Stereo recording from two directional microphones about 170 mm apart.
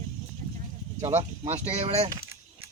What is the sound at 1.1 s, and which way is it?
Speech, 40° right (ahead or behind).